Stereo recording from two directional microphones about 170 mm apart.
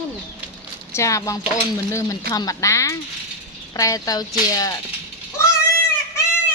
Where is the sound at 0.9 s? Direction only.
20° left (ahead or behind).